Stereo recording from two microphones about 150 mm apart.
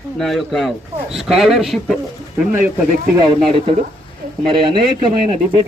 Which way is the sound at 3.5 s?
35° right (ahead or behind).